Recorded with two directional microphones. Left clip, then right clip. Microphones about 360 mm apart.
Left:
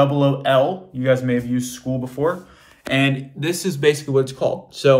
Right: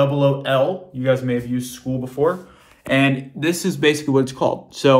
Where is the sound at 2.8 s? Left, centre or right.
Centre.